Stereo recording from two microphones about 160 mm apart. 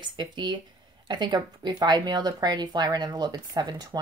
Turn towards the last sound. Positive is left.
turn(degrees=-25)  # may be behind; listen again after turning